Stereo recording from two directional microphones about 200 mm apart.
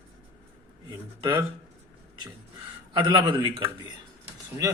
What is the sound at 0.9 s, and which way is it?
Speech, 20° right (ahead or behind).